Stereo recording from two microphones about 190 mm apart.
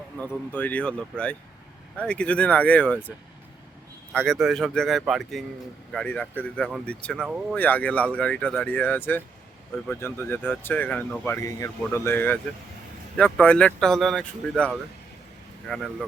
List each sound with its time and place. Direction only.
0.2 s speech: 10° left (ahead or behind)
4.1 s speech: 5° left (ahead or behind)
7.2 s speech: 5° right (ahead or behind)
7.5 s speech: 10° left (ahead or behind)